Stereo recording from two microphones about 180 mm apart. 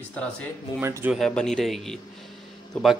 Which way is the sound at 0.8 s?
15° right (ahead or behind).